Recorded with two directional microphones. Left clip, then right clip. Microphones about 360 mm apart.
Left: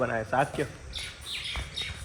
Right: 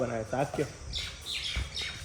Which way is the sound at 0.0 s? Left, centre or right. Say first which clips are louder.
Left 5 dB; centre.